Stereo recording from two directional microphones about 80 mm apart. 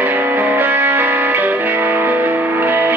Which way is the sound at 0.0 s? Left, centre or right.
Right.